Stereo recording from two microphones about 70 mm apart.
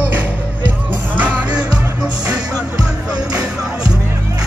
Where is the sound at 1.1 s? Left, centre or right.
Right.